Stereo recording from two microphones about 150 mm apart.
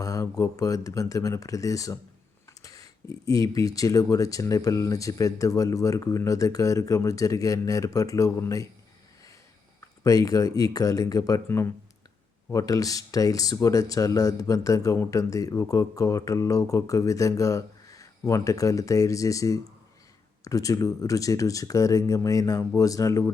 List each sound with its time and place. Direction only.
0.0 s speech: 25° left (ahead or behind)
10.0 s speech: 25° left (ahead or behind)